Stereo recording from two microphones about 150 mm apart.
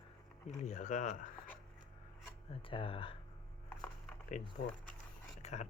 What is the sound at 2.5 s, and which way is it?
Speech, 35° left (ahead or behind).